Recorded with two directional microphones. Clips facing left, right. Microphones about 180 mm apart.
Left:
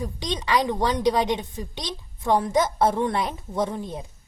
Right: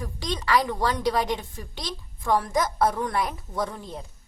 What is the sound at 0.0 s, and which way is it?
A woman's voice, 20° left (ahead or behind).